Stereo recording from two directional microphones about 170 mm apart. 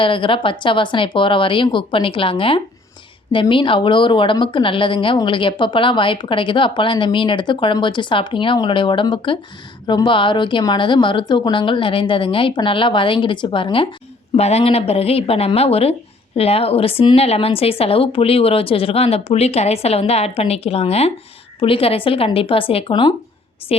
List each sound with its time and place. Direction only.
0.0 s a woman's voice: 30° left (ahead or behind)